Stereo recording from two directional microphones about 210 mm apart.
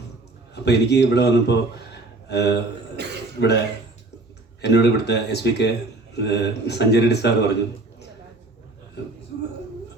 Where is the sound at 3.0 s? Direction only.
50° right (ahead or behind).